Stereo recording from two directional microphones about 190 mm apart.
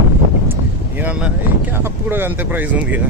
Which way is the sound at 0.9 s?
5° right (ahead or behind).